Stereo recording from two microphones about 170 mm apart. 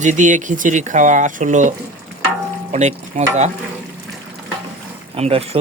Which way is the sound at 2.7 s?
40° right (ahead or behind).